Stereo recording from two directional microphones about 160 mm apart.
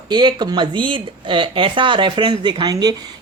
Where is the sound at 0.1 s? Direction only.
25° right (ahead or behind).